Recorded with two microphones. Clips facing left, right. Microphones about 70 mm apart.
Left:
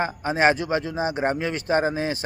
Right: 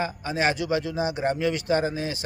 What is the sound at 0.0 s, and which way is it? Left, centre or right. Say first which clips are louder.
A man's voice: left 5 dB; left.